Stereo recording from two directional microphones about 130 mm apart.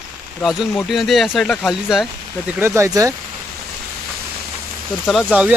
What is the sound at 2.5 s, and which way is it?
Speech, 20° right (ahead or behind).